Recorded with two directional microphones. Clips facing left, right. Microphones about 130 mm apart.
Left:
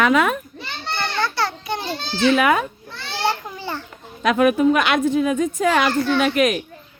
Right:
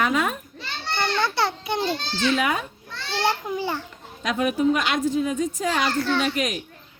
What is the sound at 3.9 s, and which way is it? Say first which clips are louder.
A woman's voice: left 8 dB; 65° left (ahead or behind).